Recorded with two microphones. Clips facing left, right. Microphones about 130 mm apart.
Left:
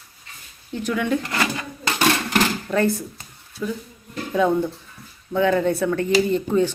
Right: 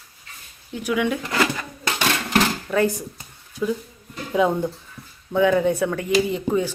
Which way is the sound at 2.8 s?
15° right (ahead or behind).